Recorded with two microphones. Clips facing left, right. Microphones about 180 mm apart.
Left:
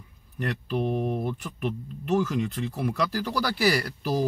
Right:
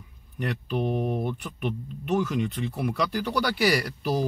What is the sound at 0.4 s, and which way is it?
Speech, centre (ahead or behind).